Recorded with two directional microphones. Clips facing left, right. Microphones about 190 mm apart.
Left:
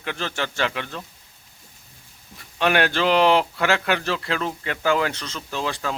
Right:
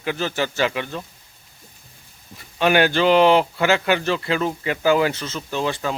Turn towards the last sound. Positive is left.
turn(degrees=0)  # may be behind; listen again after turning